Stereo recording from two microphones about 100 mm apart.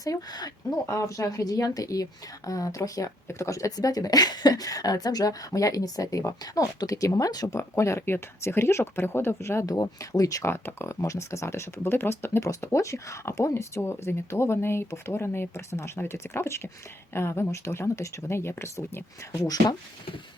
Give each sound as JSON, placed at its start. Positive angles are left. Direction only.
{"t": 0.0, "sound": "speech", "side_deg": 40}
{"t": 10.5, "sound": "speech", "side_deg": 25}